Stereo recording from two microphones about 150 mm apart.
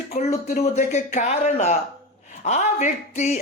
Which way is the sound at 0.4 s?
50° left (ahead or behind).